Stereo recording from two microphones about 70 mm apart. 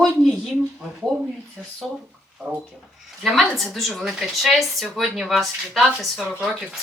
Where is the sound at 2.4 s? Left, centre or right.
Right.